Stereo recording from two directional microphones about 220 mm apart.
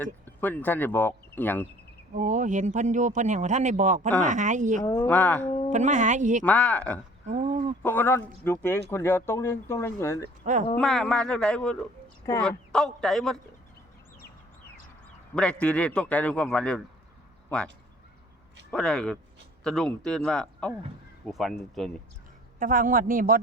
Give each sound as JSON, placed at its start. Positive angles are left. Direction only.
{"t": 0.0, "sound": "speech", "side_deg": 10}
{"t": 2.1, "sound": "a man's voice", "side_deg": -35}
{"t": 4.8, "sound": "a man's voice", "side_deg": 10}
{"t": 5.7, "sound": "a man's voice", "side_deg": -35}
{"t": 6.4, "sound": "a man's voice", "side_deg": 5}
{"t": 7.3, "sound": "a sound", "side_deg": -30}
{"t": 7.8, "sound": "a man's voice", "side_deg": 10}
{"t": 10.8, "sound": "a man's voice", "side_deg": 0}
{"t": 15.4, "sound": "a man's voice", "side_deg": 5}
{"t": 18.7, "sound": "a man's voice", "side_deg": 5}
{"t": 22.5, "sound": "a man's voice", "side_deg": -40}